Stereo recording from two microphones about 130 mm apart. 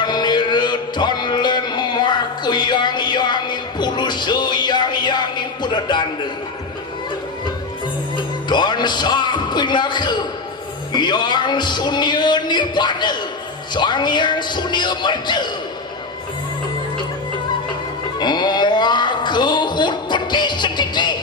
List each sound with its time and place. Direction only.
0.0 s music: 35° left (ahead or behind)
8.5 s a man's voice: 35° left (ahead or behind)
18.2 s a sound: 35° left (ahead or behind)